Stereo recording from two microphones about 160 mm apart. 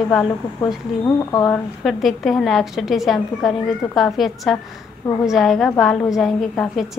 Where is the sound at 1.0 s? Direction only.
25° left (ahead or behind).